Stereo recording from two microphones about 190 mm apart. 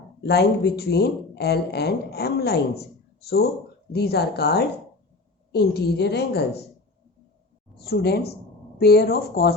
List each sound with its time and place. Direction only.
0.2 s speech: 60° left (ahead or behind)
7.8 s speech: 55° left (ahead or behind)